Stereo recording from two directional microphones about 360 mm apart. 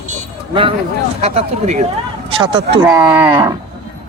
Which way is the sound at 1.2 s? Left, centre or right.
Centre.